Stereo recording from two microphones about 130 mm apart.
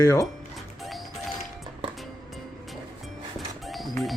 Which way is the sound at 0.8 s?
Centre (ahead or behind).